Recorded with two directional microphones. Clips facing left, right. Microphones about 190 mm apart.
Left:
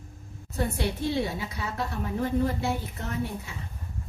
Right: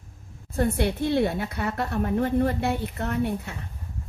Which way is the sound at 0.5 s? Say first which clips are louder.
Right 5 dB; 55° right (ahead or behind).